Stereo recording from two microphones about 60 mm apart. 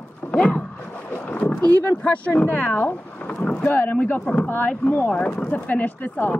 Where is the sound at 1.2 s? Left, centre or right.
Left.